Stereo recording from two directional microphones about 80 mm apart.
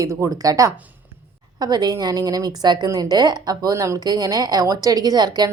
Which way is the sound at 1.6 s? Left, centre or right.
Right.